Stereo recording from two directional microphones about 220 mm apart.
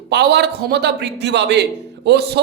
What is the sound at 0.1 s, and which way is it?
A man's voice, 50° right (ahead or behind).